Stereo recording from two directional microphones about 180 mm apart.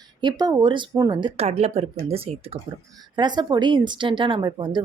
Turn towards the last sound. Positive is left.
turn(degrees=-25)  # may be behind; listen again after turning